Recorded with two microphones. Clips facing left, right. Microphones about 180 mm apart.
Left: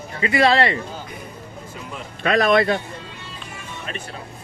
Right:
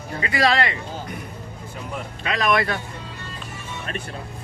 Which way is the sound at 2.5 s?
25° left (ahead or behind).